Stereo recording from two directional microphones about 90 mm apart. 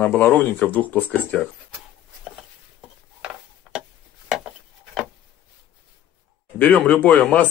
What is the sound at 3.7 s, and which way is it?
Tick-tock, 5° right (ahead or behind).